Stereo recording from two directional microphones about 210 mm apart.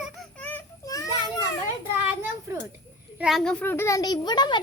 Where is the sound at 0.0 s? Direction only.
5° left (ahead or behind).